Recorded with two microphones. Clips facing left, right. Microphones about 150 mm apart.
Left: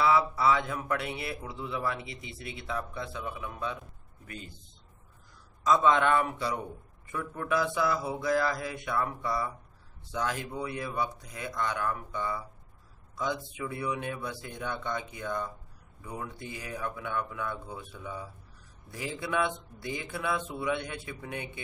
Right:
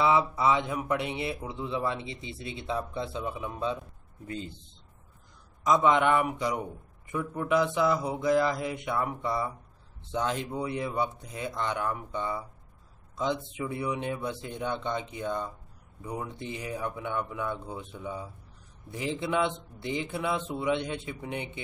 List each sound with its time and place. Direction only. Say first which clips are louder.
0.0 s a man's voice: right 1 dB; 20° right (ahead or behind)
5.6 s a man's voice: right 1 dB; 15° right (ahead or behind)